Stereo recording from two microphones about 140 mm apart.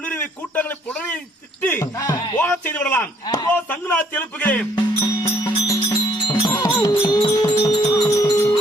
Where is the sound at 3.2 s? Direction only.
30° left (ahead or behind).